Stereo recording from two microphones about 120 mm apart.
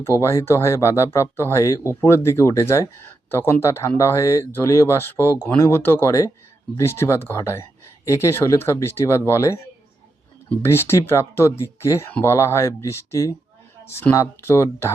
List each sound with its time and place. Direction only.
0.2 s speech: 20° left (ahead or behind)
10.6 s speech: 20° left (ahead or behind)